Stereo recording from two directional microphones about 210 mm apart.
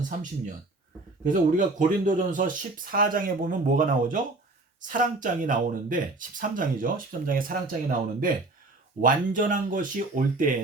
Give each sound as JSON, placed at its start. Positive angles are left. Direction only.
{"t": 1.2, "sound": "speech", "side_deg": -40}